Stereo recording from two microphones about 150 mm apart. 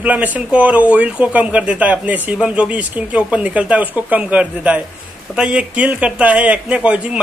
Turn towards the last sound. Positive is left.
turn(degrees=-10)  # may be behind; listen again after turning